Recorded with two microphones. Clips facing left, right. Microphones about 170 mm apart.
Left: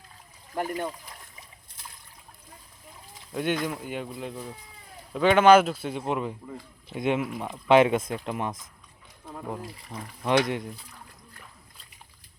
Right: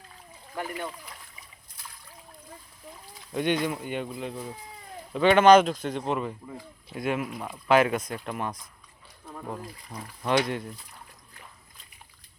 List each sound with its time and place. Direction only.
0.5 s speech: 40° left (ahead or behind)
3.3 s speech: centre (ahead or behind)
6.9 s speech: 20° left (ahead or behind)
9.3 s speech: 5° left (ahead or behind)
10.2 s speech: 15° left (ahead or behind)